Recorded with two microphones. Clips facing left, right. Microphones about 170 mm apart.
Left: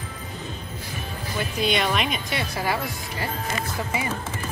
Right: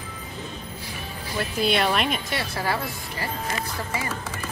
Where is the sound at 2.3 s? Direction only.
15° left (ahead or behind).